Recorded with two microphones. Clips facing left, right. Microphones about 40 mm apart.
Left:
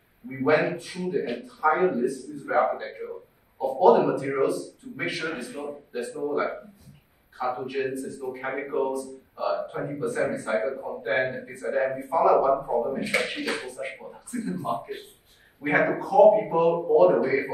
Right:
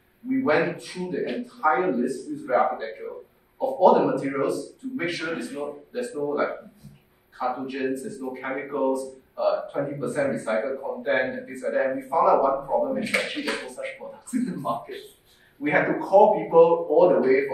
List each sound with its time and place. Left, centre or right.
0.3 s a man's voice: centre